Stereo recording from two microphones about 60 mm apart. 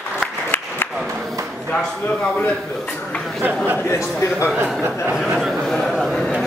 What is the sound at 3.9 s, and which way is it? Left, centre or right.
Speech, left.